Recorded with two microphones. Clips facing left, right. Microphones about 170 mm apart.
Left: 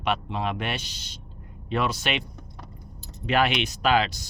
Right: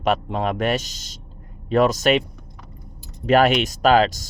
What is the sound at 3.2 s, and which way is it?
Speech, 45° right (ahead or behind).